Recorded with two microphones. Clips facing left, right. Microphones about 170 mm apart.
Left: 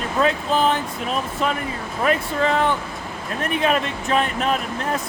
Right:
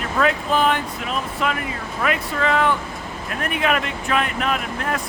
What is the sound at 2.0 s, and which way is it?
Speech, 35° left (ahead or behind).